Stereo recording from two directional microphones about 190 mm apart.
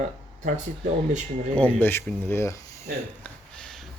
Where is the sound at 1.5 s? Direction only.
10° left (ahead or behind).